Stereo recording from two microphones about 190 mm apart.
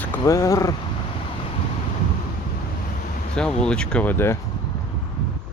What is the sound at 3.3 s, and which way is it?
Speech, 5° left (ahead or behind).